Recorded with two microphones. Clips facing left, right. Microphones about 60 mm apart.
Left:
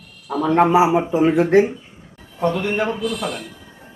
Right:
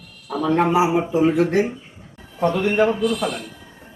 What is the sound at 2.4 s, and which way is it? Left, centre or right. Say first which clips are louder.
Speech: right 1 dB; centre.